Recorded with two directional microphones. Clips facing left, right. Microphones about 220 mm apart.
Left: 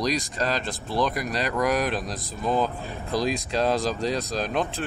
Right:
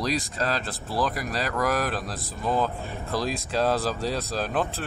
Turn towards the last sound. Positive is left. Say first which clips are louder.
# left 1 dB
turn(degrees=-5)  # may be behind; listen again after turning